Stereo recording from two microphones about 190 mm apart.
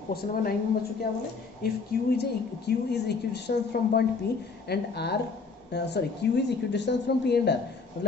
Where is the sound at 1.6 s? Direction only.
55° left (ahead or behind).